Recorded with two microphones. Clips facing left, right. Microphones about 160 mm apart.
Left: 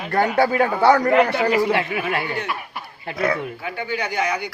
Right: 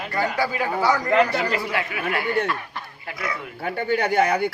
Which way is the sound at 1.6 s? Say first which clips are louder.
Left 5 dB; 25° left (ahead or behind).